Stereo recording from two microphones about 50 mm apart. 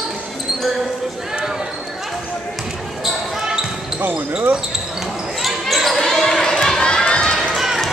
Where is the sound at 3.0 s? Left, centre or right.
Centre.